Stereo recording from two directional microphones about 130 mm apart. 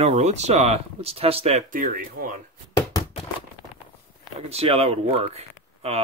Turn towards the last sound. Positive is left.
turn(degrees=-55)  # may be behind; listen again after turning